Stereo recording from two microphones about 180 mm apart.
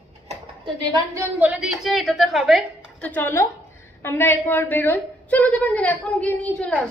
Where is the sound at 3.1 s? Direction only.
15° left (ahead or behind).